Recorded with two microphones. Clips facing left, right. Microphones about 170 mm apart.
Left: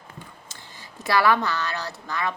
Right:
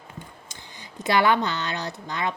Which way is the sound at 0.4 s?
15° right (ahead or behind).